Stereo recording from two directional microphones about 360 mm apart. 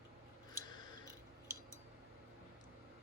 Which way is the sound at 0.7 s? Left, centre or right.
Centre.